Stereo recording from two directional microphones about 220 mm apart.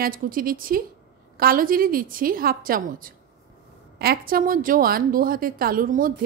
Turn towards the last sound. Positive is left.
turn(degrees=-40)  # may be behind; listen again after turning